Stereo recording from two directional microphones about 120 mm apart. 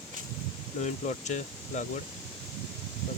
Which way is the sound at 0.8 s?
90° left.